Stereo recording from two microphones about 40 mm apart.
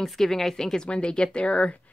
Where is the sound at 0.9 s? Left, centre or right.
Left.